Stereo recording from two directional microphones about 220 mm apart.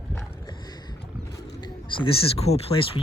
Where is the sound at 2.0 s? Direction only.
25° left (ahead or behind).